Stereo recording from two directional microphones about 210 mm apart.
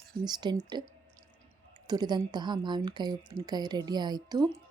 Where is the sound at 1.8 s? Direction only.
20° right (ahead or behind).